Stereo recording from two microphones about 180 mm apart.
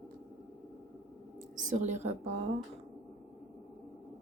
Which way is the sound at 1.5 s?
45° right (ahead or behind).